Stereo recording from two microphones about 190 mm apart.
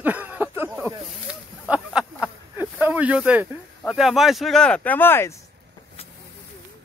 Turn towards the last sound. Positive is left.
turn(degrees=10)  # may be behind; listen again after turning